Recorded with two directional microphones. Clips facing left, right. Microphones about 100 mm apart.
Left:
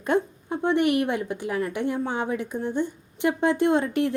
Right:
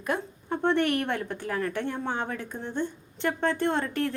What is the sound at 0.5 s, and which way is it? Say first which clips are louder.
A woman's voice: left 3 dB; 15° left (ahead or behind).